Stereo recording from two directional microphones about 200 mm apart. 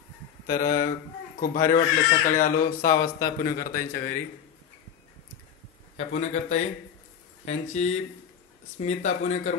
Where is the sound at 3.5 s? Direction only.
45° left (ahead or behind).